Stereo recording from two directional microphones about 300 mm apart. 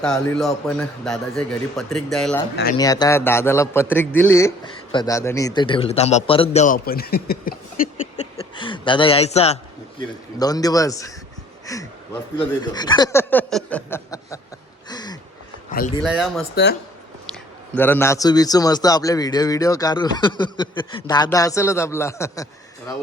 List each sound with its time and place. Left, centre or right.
0.0 s a man's voice: centre
2.7 s a man's voice: centre; by 7.6 s left
8.1 s a man's voice: centre
14.8 s a sound: centre
16.0 s a man's voice: centre
17.7 s a man's voice: centre